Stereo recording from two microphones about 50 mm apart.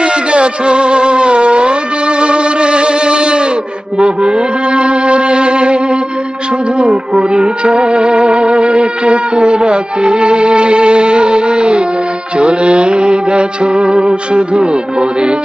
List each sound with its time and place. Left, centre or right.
0.0 s music: right